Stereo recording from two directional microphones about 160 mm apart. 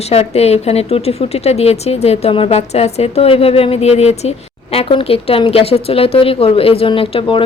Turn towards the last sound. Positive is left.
turn(degrees=35)  # may be behind; listen again after turning